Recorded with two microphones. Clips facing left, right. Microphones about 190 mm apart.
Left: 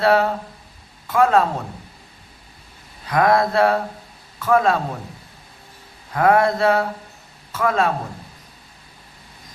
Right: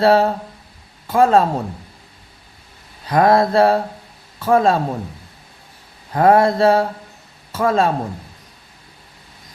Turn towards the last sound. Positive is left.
turn(degrees=-30)  # may be behind; listen again after turning